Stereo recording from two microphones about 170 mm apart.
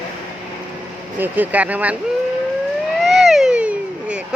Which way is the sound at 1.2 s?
10° right (ahead or behind).